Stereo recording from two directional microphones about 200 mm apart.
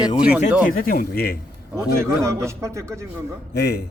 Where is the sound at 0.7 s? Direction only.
45° left (ahead or behind).